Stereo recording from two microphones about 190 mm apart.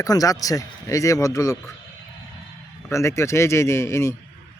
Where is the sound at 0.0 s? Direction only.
20° left (ahead or behind).